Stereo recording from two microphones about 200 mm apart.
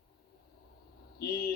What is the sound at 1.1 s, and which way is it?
Speech, 50° left (ahead or behind).